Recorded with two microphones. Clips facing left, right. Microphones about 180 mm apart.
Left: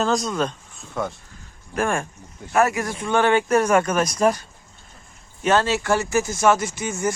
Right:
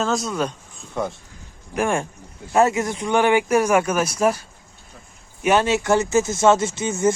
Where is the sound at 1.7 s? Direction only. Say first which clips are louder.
Right 2 dB; 15° right (ahead or behind).